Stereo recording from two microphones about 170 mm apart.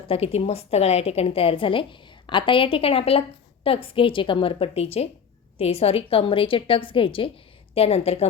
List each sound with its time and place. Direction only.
0.1 s a woman's voice: 35° left (ahead or behind)